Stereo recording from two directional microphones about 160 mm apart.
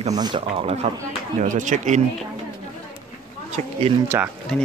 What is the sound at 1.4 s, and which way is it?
Speech, 50° right (ahead or behind).